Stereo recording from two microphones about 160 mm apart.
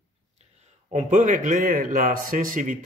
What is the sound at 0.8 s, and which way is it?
A man's voice, 50° right (ahead or behind).